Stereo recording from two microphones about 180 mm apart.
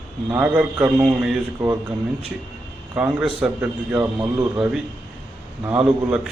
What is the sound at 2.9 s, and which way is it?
A man's voice, 10° right (ahead or behind).